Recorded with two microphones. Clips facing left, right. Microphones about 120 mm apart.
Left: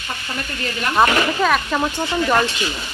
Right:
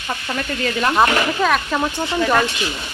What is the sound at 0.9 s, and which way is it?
Speech, centre (ahead or behind).